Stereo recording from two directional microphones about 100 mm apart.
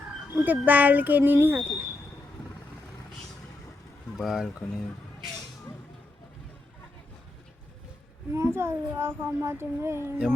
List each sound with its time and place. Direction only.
0.3 s a child's voice: 20° right (ahead or behind)
4.2 s speech: 5° right (ahead or behind)
8.3 s a child's voice: 25° right (ahead or behind)